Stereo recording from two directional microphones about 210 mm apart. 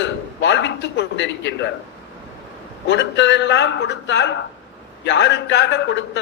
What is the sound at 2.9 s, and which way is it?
A man's voice, 55° left (ahead or behind).